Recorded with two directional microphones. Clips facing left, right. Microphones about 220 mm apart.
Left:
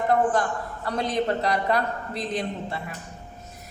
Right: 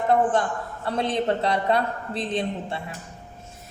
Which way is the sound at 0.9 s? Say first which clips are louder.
Right 1 dB; 25° right (ahead or behind).